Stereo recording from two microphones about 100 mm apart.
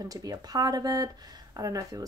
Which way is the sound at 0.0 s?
40° right (ahead or behind).